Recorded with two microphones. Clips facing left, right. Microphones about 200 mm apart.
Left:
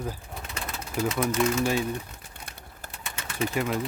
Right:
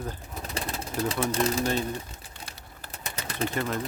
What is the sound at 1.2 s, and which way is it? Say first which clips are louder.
Speech: left 2 dB; 35° right (ahead or behind).